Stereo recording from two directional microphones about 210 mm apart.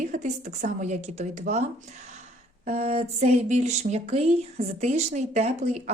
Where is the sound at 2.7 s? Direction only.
30° right (ahead or behind).